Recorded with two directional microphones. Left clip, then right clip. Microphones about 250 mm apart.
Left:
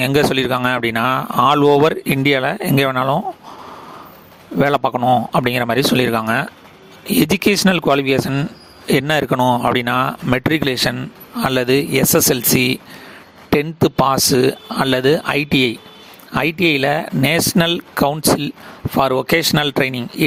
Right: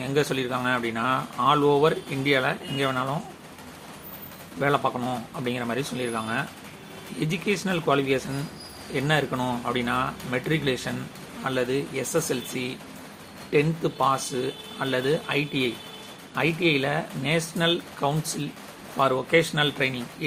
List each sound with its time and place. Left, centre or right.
0.0 s speech: left
4.6 s speech: left